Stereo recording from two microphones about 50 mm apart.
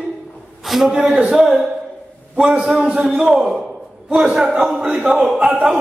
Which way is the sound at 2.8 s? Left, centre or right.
Centre.